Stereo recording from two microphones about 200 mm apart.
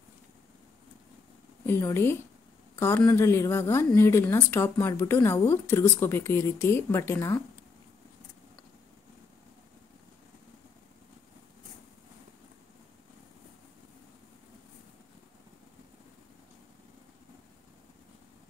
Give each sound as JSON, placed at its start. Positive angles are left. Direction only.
{"t": 1.7, "sound": "speech", "side_deg": 10}